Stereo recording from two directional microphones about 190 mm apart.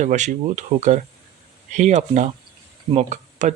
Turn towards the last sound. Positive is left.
turn(degrees=-40)  # may be behind; listen again after turning